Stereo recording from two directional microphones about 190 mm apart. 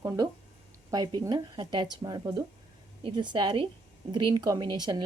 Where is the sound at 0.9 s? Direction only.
20° right (ahead or behind).